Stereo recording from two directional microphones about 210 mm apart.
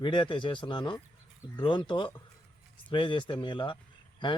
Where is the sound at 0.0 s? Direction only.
20° left (ahead or behind).